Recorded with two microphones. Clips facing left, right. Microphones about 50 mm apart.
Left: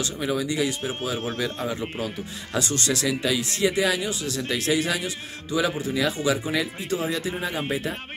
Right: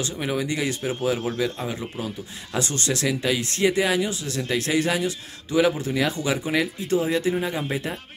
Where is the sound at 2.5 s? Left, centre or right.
Right.